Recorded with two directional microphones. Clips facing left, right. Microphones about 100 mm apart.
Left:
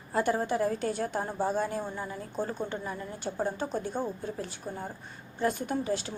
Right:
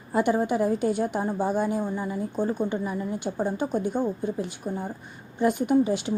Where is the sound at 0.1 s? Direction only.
15° right (ahead or behind).